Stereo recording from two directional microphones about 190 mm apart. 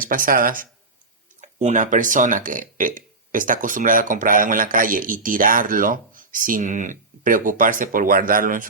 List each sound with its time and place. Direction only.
0.0 s speech: 45° right (ahead or behind)